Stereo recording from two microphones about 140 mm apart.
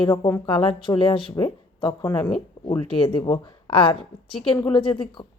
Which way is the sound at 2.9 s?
40° left (ahead or behind).